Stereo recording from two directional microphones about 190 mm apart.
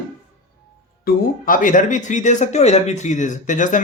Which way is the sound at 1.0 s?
45° left (ahead or behind).